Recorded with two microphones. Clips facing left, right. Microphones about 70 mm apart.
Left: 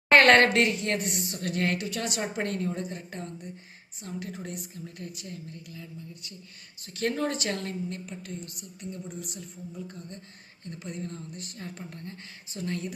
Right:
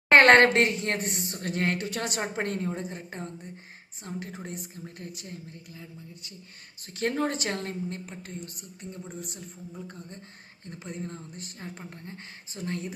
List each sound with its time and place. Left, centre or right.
0.1 s a woman's voice: right